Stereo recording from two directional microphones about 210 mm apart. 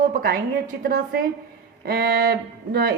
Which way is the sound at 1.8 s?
45° right (ahead or behind).